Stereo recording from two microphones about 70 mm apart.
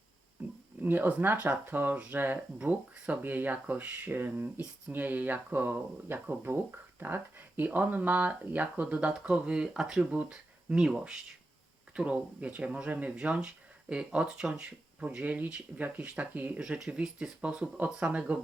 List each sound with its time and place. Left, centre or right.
0.4 s a sound: centre
0.8 s speech: right; by 10.1 s centre
10.1 s speech: centre
16.6 s speech: centre